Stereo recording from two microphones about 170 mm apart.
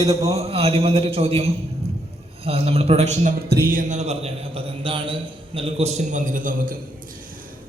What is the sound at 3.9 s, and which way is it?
A man's voice, 40° right (ahead or behind).